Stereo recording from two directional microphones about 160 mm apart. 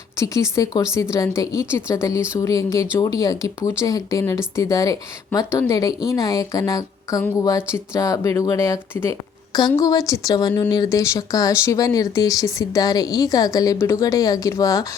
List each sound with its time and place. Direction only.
0.2 s speech: 20° left (ahead or behind)